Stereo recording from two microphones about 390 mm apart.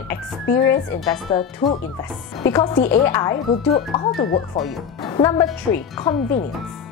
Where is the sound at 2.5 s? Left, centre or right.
Centre.